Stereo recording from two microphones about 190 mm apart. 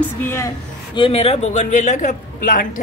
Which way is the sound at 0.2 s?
10° left (ahead or behind).